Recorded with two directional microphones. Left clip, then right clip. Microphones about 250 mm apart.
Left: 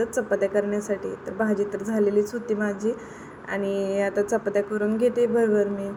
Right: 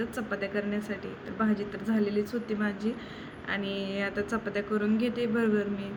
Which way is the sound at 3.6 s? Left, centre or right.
Left.